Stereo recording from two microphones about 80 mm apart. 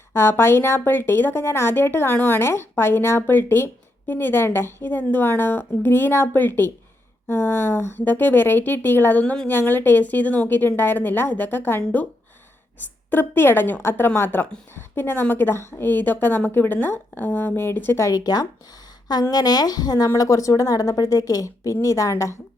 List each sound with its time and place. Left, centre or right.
0.1 s a woman's voice: left
18.0 s a woman's voice: left
20.1 s speech: left